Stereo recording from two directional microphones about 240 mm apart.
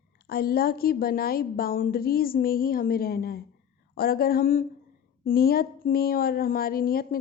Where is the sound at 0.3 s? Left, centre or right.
Left.